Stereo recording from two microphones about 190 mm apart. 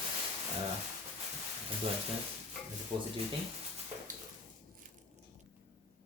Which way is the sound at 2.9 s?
30° right (ahead or behind).